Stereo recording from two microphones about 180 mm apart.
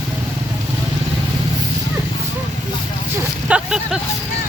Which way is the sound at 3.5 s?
5° right (ahead or behind).